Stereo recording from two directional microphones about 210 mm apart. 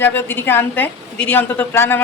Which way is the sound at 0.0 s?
10° left (ahead or behind).